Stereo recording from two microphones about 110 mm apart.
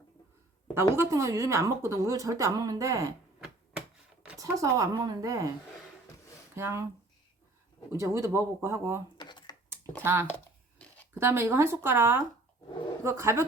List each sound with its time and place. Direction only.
0.7 s a woman's voice: 20° right (ahead or behind)
3.4 s a sound: 5° right (ahead or behind)
4.4 s a woman's voice: 30° right (ahead or behind)
6.6 s a woman's voice: 25° right (ahead or behind)
7.9 s a woman's voice: 30° right (ahead or behind)
9.1 s a sound: 40° left (ahead or behind)
10.0 s a woman's voice: 20° right (ahead or behind)
10.2 s tearing: 15° left (ahead or behind)
11.1 s a woman's voice: 20° right (ahead or behind)